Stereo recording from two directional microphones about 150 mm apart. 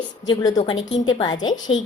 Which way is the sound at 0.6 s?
30° left (ahead or behind).